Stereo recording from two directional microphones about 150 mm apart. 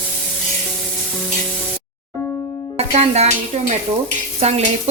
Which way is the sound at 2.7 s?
45° right (ahead or behind).